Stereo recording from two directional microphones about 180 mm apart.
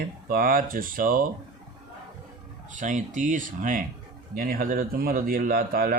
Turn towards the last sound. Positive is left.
turn(degrees=-55)  # may be behind; listen again after turning